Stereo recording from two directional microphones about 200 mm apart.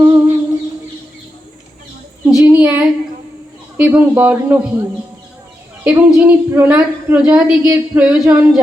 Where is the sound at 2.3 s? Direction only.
10° right (ahead or behind).